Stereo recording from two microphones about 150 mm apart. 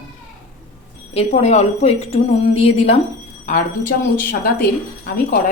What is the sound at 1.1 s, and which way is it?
Speech, 45° left (ahead or behind).